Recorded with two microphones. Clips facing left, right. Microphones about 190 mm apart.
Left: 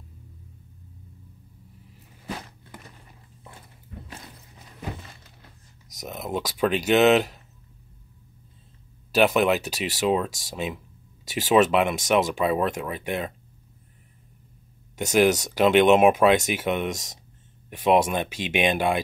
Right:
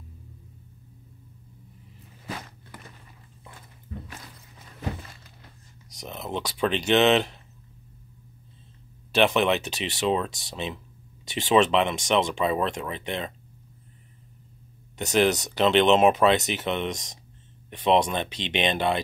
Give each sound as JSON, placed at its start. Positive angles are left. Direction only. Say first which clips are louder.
{"t": 5.9, "sound": "speech", "louder": "left 2 dB", "side_deg": 10}
{"t": 9.1, "sound": "speech", "louder": "left 2 dB", "side_deg": 5}
{"t": 15.0, "sound": "speech", "louder": "left 2 dB", "side_deg": 10}